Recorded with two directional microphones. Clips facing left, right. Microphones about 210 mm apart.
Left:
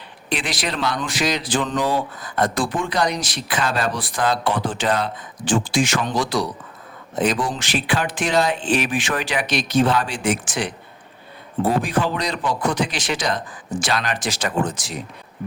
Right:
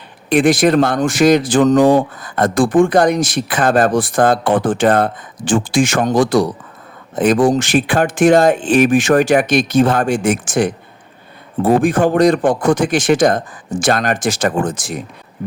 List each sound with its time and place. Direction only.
0.3 s speech: 50° right (ahead or behind)